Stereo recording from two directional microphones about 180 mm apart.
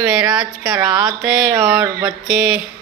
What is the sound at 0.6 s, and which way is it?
Speech, 15° right (ahead or behind).